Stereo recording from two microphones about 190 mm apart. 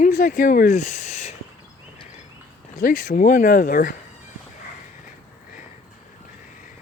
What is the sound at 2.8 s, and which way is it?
Speech, 45° left (ahead or behind).